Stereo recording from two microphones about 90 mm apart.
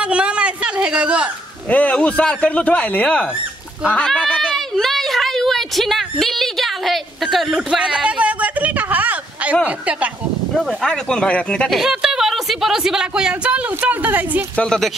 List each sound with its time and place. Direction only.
0.0 s a sound: 15° right (ahead or behind)
1.7 s speech: 15° left (ahead or behind)
3.9 s a sound: 10° left (ahead or behind); by 9.6 s 15° right (ahead or behind)
9.7 s speech: 15° right (ahead or behind)
10.5 s speech: 5° left (ahead or behind)
11.7 s speech: 5° right (ahead or behind)
14.6 s speech: 5° left (ahead or behind)